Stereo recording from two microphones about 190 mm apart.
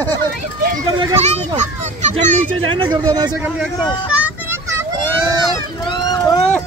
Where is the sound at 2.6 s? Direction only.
25° right (ahead or behind).